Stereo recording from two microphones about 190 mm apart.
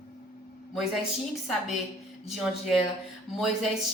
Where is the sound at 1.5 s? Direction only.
Centre (ahead or behind).